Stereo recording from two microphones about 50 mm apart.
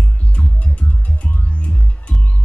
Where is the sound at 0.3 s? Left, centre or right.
Left.